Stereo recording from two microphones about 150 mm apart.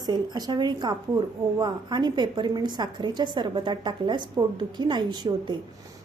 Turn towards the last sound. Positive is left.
turn(degrees=-30)  # may be behind; listen again after turning